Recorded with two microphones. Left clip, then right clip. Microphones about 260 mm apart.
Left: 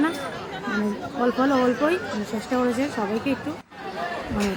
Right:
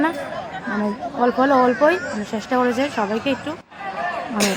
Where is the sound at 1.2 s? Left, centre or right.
Centre.